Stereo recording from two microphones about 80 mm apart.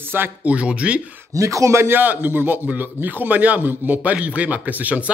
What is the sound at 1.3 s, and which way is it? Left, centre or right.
Speech, right.